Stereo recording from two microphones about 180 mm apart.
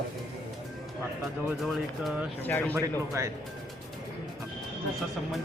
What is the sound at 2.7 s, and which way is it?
Speech, 15° right (ahead or behind).